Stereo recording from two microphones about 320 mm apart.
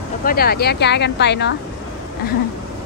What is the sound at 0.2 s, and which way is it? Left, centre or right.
Speech, left.